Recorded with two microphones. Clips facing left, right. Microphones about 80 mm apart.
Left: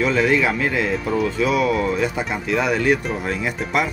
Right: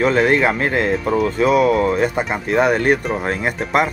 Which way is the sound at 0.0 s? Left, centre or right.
Right.